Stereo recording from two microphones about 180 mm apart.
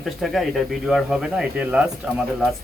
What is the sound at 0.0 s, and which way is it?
Speech, centre (ahead or behind).